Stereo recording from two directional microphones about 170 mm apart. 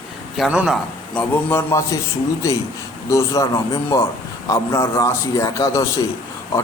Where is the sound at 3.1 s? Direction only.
20° left (ahead or behind).